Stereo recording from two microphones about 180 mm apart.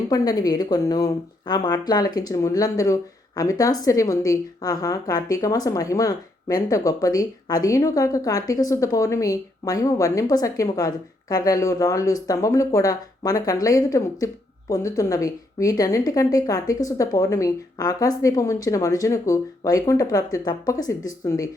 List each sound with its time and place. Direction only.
0.1 s speech: 20° left (ahead or behind)